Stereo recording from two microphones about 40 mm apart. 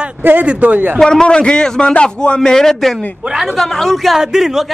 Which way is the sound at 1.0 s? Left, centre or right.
Centre.